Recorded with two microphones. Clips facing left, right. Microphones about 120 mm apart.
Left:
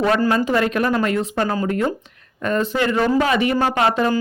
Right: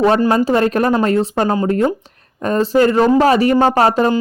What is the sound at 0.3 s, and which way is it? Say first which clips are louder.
Speech: right 4 dB; 30° right (ahead or behind).